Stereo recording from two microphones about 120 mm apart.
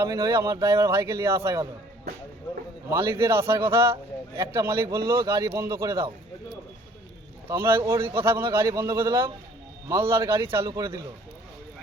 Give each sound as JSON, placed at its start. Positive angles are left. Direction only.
{"t": 0.0, "sound": "speech", "side_deg": -25}
{"t": 2.9, "sound": "speech", "side_deg": -25}
{"t": 7.4, "sound": "speech", "side_deg": -20}